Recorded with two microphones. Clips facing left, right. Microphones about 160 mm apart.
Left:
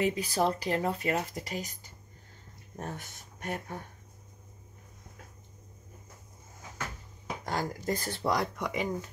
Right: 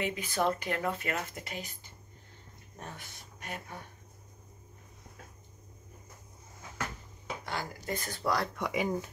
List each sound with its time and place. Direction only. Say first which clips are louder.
0.0 s speech: left 3 dB; 35° left (ahead or behind)
7.4 s speech: left 6 dB; 40° left (ahead or behind); by 8.5 s 20° left (ahead or behind)
8.5 s speech: right 1 dB; centre (ahead or behind)